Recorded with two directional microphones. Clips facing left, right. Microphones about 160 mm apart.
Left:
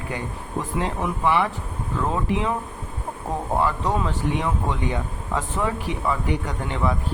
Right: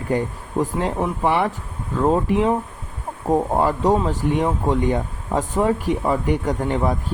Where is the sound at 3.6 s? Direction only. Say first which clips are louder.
Right 5 dB; 40° right (ahead or behind).